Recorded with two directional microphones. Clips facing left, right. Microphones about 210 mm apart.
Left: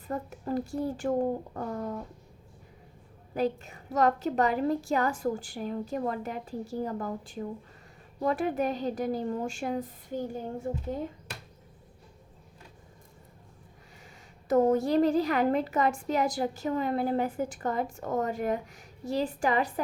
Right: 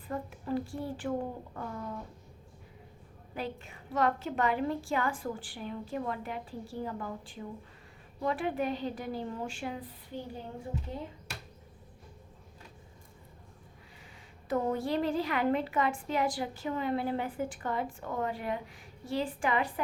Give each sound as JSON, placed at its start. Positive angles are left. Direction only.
{"t": 0.1, "sound": "a woman's voice", "side_deg": 40}
{"t": 3.3, "sound": "a woman's voice", "side_deg": 40}
{"t": 14.4, "sound": "a woman's voice", "side_deg": 45}